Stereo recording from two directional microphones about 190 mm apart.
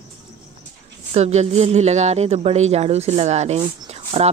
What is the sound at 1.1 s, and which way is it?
A woman's voice, 35° right (ahead or behind).